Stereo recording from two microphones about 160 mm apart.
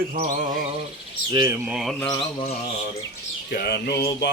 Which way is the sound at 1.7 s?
Centre (ahead or behind).